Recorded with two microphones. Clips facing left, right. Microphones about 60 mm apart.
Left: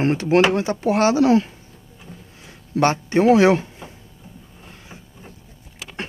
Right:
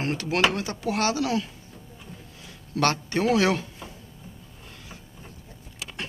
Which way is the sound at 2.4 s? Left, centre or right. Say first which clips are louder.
Left 5 dB; left.